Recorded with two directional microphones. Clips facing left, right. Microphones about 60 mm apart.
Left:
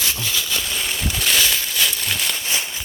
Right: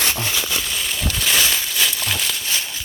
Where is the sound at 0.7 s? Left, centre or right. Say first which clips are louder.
Even; centre.